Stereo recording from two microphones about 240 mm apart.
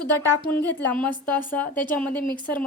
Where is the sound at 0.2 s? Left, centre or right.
Centre.